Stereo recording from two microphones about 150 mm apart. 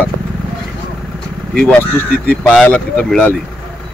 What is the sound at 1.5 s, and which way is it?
Speech, 5° left (ahead or behind).